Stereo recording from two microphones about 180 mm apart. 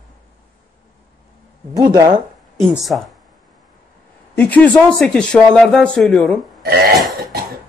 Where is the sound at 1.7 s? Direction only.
20° right (ahead or behind).